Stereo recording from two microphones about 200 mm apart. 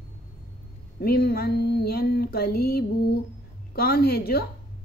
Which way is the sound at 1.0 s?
50° left (ahead or behind).